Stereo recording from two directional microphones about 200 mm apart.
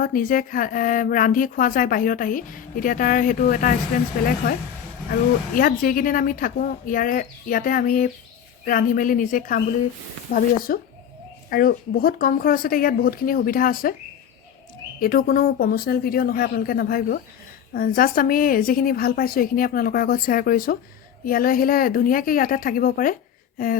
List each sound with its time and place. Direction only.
0.0 s speech: 45° left (ahead or behind)
5.5 s speech: 45° left (ahead or behind)
15.0 s speech: 45° left (ahead or behind)